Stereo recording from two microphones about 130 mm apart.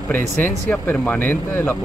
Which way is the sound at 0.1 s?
15° left (ahead or behind).